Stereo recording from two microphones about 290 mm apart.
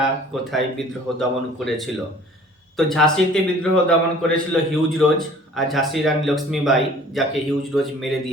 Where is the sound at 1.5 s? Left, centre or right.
Centre.